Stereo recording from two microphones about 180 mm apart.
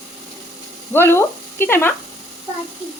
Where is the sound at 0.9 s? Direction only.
15° left (ahead or behind).